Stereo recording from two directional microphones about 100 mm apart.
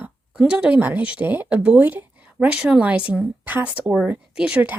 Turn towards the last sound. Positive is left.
turn(degrees=-10)  # may be behind; listen again after turning